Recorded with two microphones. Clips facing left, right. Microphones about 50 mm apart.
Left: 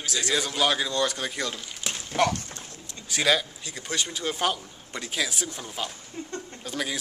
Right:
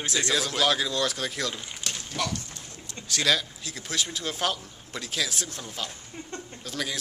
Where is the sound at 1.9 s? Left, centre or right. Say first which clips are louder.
Left 2 dB; centre.